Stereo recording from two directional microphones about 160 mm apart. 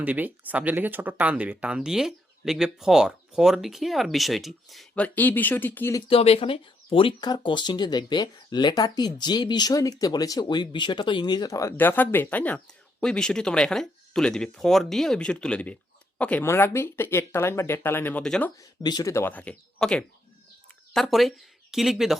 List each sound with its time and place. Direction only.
0.0 s speech: 10° right (ahead or behind); by 6.0 s 15° left (ahead or behind)
6.1 s speech: 35° left (ahead or behind); by 18.5 s 5° left (ahead or behind)
18.6 s speech: 25° left (ahead or behind); by 22.2 s centre (ahead or behind)